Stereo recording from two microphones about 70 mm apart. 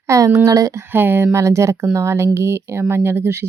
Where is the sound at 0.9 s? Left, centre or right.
Right.